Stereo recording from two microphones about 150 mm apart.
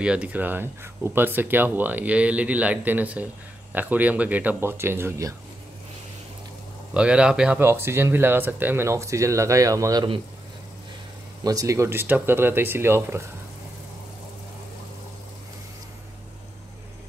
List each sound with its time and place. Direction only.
0.0 s speech: 5° right (ahead or behind)
6.9 s speech: 5° right (ahead or behind); by 10.0 s 20° right (ahead or behind)
11.4 s speech: 20° right (ahead or behind)